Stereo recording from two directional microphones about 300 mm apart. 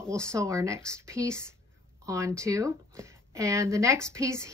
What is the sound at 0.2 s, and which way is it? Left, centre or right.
A woman's voice, centre.